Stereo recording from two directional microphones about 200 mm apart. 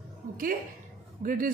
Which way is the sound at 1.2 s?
45° right (ahead or behind).